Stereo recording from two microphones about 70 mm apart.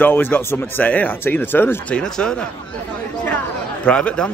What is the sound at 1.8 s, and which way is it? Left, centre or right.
Speech, centre.